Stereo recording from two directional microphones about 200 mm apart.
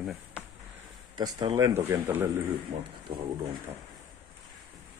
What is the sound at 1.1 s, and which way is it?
Speech, 20° right (ahead or behind).